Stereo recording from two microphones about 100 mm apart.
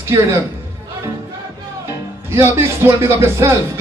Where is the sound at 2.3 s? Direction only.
25° right (ahead or behind).